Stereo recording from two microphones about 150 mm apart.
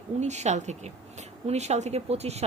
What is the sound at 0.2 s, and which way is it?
A woman's voice, 50° right (ahead or behind).